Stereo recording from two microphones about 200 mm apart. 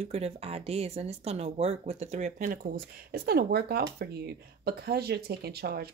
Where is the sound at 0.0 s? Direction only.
30° right (ahead or behind).